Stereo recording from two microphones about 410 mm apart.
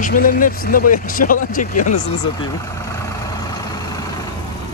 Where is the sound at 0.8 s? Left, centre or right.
Left.